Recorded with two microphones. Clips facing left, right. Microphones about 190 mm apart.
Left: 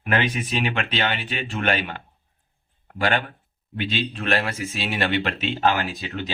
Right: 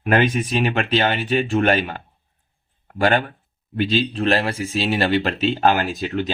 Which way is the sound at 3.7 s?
35° right (ahead or behind).